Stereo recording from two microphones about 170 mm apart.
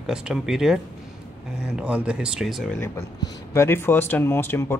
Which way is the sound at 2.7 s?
15° left (ahead or behind).